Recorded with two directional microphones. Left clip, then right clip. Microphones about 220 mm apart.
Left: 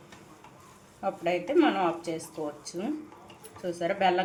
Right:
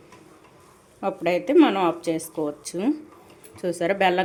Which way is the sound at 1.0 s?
50° right (ahead or behind).